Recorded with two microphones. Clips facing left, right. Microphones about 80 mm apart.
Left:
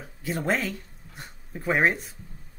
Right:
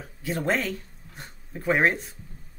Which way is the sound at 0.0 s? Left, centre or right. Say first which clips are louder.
Right 1 dB; centre.